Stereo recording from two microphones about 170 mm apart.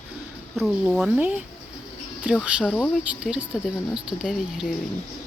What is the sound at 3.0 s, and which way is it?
Speech, 5° right (ahead or behind).